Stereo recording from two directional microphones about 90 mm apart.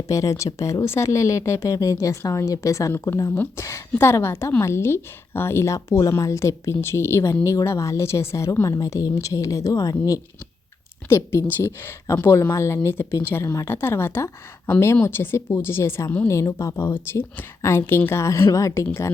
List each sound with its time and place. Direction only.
0.1 s speech: 40° left (ahead or behind)
2.9 s a woman's voice: 25° left (ahead or behind)
3.6 s a woman's voice: 35° left (ahead or behind)
11.1 s a woman's voice: 30° left (ahead or behind)
16.9 s a woman's voice: 25° left (ahead or behind)